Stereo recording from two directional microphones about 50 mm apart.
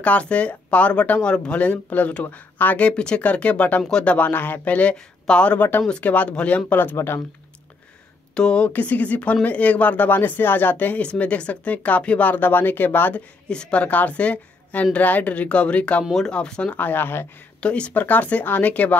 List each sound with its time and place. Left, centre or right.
0.0 s a woman's voice: left
4.3 s speech: left
4.9 s speech: centre
5.6 s speech: left
5.9 s a woman's voice: left
8.4 s speech: centre
8.6 s speech: left
11.0 s a woman's voice: left
12.3 s speech: left
13.1 s a woman's voice: left
16.7 s speech: left
17.6 s speech: left
17.9 s speech: left